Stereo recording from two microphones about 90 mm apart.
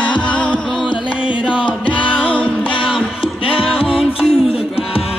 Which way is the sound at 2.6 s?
75° left (ahead or behind).